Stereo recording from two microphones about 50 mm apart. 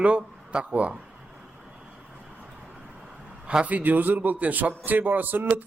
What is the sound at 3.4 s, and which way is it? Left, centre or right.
Speech, right.